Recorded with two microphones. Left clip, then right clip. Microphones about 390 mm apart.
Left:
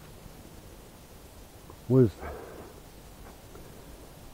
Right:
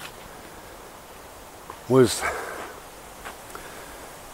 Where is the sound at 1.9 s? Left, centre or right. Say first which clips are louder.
Right 6 dB; centre.